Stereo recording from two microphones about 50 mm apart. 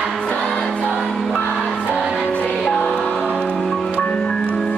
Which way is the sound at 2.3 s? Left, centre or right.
Left.